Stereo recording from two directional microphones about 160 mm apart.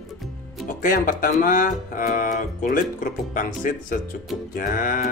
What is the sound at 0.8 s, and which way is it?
Music, 55° left (ahead or behind).